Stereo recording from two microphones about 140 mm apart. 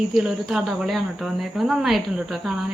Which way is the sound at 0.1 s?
5° right (ahead or behind).